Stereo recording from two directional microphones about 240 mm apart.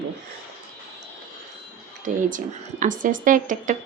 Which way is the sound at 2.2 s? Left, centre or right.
Right.